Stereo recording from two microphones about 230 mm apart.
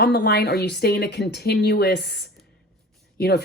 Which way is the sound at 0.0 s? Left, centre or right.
Left.